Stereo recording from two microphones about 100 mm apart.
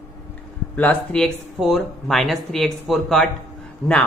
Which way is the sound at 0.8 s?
10° left (ahead or behind).